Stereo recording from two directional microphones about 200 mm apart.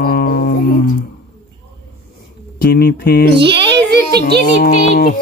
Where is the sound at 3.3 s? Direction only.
55° right (ahead or behind).